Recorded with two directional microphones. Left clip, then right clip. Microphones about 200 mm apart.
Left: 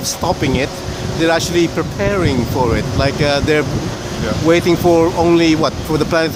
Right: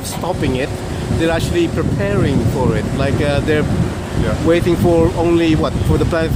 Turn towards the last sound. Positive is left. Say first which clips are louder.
# left 2 dB
turn(degrees=20)  # may be behind; listen again after turning